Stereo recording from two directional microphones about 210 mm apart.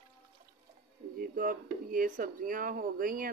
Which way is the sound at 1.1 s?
40° right (ahead or behind).